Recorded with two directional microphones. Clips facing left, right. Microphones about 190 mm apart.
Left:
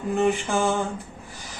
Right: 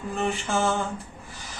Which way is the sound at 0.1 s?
15° left (ahead or behind).